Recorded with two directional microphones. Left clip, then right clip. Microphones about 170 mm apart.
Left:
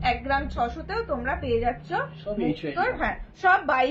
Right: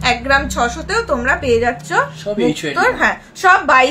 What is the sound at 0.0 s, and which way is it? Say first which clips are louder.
A woman's voice: right 10 dB; 25° right (ahead or behind).